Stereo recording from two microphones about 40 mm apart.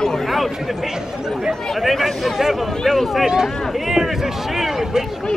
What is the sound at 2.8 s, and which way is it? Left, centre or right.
Speech, centre.